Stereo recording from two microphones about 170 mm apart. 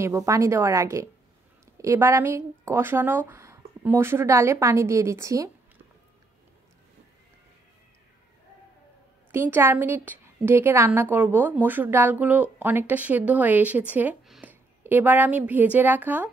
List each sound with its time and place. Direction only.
0.0 s a woman's voice: 15° right (ahead or behind)
9.3 s a woman's voice: 15° right (ahead or behind)